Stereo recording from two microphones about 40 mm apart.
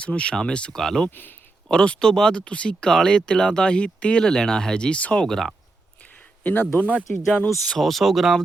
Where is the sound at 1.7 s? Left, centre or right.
Left.